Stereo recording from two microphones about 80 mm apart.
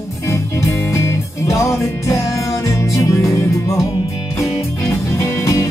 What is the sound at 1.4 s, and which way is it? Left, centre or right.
Music, left.